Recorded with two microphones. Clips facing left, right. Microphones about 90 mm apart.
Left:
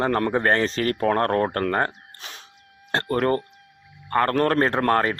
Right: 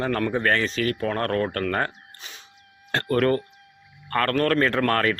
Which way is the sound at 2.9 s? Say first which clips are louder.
Even; 25° left (ahead or behind).